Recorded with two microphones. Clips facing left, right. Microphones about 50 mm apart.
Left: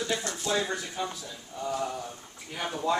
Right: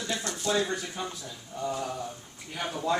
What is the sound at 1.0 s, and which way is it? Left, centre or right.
Speech, centre.